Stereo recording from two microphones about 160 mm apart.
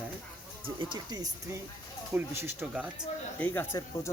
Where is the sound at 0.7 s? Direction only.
25° right (ahead or behind).